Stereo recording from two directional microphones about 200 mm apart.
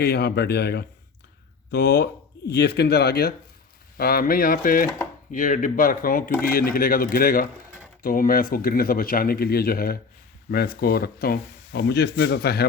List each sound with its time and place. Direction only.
0.0 s speech: 55° left (ahead or behind)